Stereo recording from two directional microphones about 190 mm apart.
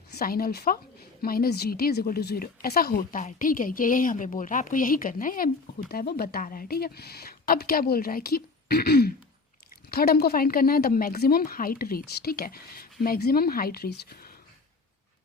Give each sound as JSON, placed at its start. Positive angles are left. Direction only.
{"t": 0.1, "sound": "a woman's voice", "side_deg": 55}